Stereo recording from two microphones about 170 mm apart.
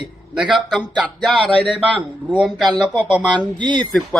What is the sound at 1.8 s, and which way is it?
A man's voice, 10° right (ahead or behind).